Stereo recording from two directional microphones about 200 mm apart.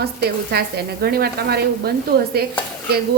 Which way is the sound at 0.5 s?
50° right (ahead or behind).